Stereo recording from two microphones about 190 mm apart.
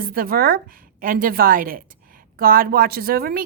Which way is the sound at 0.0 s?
50° right (ahead or behind).